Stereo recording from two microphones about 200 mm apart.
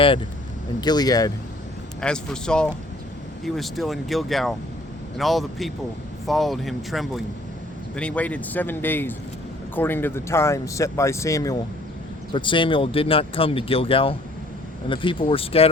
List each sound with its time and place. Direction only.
0.8 s speech: 20° left (ahead or behind)
2.0 s speech: 5° left (ahead or behind); by 15.7 s 30° left (ahead or behind)